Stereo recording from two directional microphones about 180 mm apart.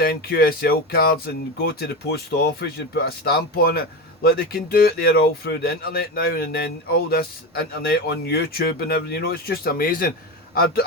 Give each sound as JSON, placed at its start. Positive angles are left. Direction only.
{"t": 0.0, "sound": "speech", "side_deg": 55}